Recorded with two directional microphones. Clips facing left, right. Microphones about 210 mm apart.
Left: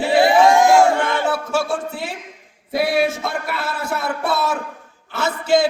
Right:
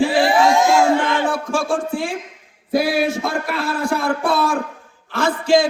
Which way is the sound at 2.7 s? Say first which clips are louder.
Right 1 dB; centre (ahead or behind).